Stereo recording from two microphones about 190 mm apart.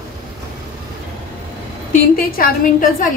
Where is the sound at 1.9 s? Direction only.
50° left (ahead or behind).